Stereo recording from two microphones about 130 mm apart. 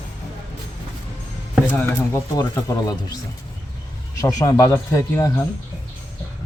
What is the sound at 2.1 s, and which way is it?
Speech, 20° left (ahead or behind).